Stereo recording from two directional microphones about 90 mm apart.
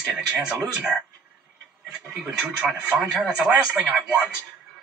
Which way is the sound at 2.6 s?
10° right (ahead or behind).